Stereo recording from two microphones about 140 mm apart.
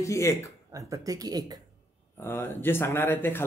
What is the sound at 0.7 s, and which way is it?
Speech, 25° right (ahead or behind).